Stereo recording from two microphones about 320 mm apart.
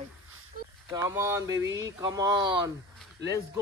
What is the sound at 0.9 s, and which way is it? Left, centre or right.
Speech, centre.